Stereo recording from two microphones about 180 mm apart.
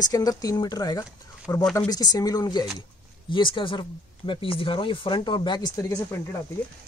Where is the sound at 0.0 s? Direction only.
20° left (ahead or behind).